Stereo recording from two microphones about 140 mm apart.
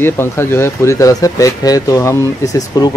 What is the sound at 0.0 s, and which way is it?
Speech, 15° left (ahead or behind).